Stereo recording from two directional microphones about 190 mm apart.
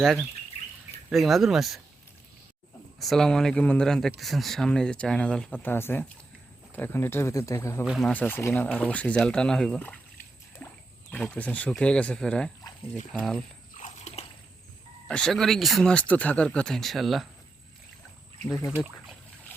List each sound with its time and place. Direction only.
0.0 s speech: centre (ahead or behind)
3.0 s speech: centre (ahead or behind)
7.9 s speech: centre (ahead or behind)
10.6 s a sound: 10° left (ahead or behind)
11.1 s speech: 5° left (ahead or behind)
13.7 s biting: 40° left (ahead or behind)
15.0 s speech: 5° left (ahead or behind)
18.4 s speech: 10° left (ahead or behind)
18.8 s boat: 5° left (ahead or behind)